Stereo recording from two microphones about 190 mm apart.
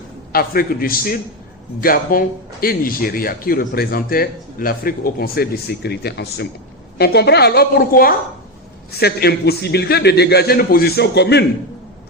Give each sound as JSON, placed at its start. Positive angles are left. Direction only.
{"t": 0.3, "sound": "a man's voice", "side_deg": 50}